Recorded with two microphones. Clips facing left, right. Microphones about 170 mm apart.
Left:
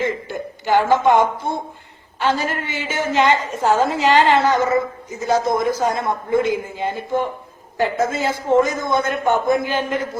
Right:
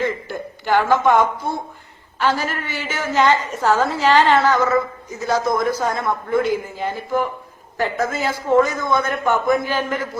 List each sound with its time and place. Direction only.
0.0 s a man's voice: 20° left (ahead or behind)